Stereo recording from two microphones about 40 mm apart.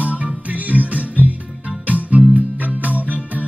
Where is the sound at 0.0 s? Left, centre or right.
Right.